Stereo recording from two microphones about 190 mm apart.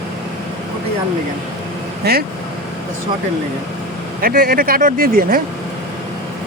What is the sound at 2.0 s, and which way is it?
Speech, 55° right (ahead or behind).